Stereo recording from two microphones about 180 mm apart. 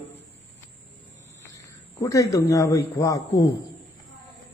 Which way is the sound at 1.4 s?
15° left (ahead or behind).